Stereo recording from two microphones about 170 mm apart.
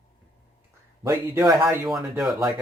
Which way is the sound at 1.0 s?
20° right (ahead or behind).